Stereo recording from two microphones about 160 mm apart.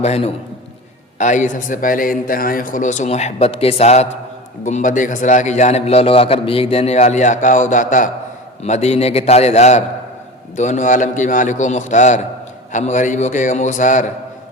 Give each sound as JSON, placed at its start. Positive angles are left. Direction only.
{"t": 0.0, "sound": "a man's voice", "side_deg": 40}